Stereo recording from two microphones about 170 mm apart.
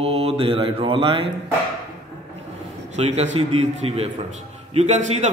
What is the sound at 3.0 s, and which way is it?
Mantra, 40° right (ahead or behind).